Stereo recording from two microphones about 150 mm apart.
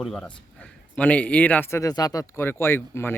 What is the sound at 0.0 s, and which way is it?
Speech, 5° left (ahead or behind).